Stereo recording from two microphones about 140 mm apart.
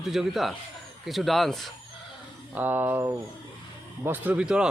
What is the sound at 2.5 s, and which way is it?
Speech, 15° right (ahead or behind).